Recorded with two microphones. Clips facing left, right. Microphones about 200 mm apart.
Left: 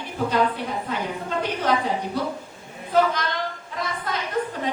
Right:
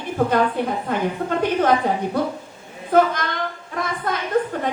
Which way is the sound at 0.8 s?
50° right (ahead or behind).